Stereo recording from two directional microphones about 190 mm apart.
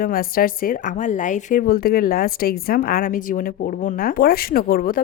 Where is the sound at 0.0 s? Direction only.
50° left (ahead or behind).